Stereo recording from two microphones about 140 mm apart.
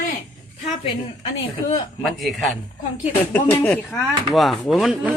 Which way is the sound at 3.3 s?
15° left (ahead or behind).